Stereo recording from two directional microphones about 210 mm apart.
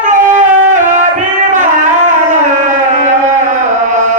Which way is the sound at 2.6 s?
35° right (ahead or behind).